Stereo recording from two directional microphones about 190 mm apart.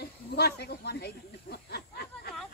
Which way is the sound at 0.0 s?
60° left (ahead or behind).